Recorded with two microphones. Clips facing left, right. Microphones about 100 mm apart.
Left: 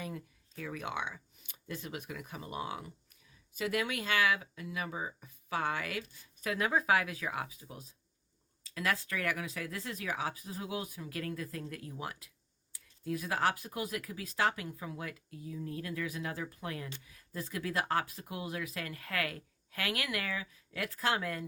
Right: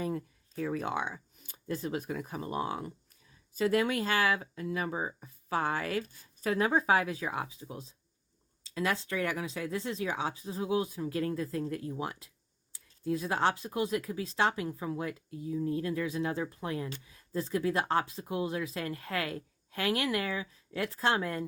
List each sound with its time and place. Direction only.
0.0 s speech: 35° right (ahead or behind)